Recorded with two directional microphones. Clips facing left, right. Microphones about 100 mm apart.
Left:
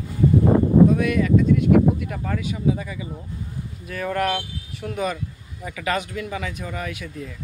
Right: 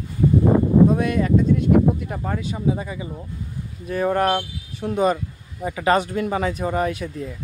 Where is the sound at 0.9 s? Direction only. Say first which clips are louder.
Even; 35° right (ahead or behind).